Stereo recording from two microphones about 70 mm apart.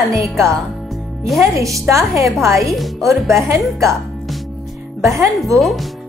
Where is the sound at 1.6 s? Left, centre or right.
Right.